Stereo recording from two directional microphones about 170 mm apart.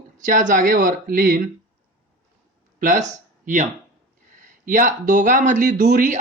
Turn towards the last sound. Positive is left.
turn(degrees=-50)  # may be behind; listen again after turning